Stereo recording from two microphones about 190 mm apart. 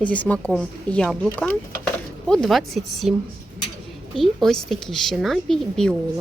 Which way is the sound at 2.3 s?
Centre (ahead or behind).